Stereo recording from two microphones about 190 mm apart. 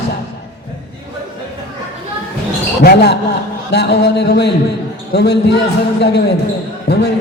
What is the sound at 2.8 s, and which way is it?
A man's voice, 60° left (ahead or behind).